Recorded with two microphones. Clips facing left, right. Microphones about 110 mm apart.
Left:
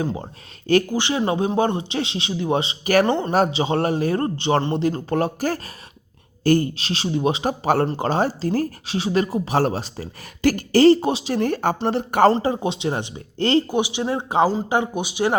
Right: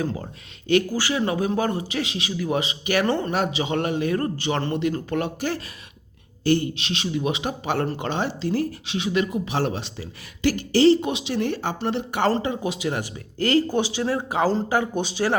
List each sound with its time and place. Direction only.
0.0 s a man's voice: 25° left (ahead or behind); by 3.1 s 40° left (ahead or behind)
3.1 s a man's voice: 25° left (ahead or behind)
3.3 s speech: 35° left (ahead or behind)
11.0 s speech: 35° left (ahead or behind)
12.4 s a man's voice: 30° left (ahead or behind)
13.7 s a man's voice: 15° left (ahead or behind)